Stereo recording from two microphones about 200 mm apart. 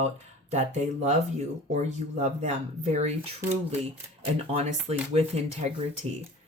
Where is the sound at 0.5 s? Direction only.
35° right (ahead or behind).